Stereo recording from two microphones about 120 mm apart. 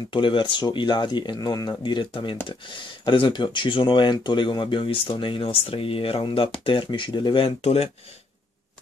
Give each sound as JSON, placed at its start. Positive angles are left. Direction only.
{"t": 0.1, "sound": "speech", "side_deg": 45}